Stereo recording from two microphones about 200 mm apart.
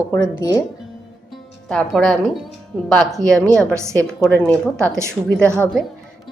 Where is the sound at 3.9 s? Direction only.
5° left (ahead or behind).